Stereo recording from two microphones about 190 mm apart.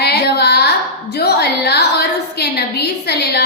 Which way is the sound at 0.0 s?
55° left (ahead or behind).